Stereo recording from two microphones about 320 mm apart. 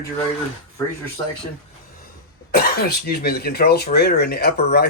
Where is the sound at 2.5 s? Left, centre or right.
Left.